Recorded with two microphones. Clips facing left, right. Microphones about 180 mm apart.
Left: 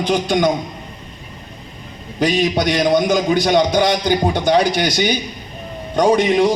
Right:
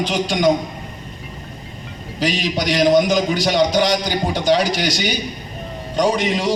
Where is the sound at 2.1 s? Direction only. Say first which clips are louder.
Left 4 dB; 55° left (ahead or behind).